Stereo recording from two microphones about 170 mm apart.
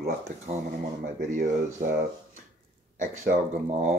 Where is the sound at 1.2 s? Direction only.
45° right (ahead or behind).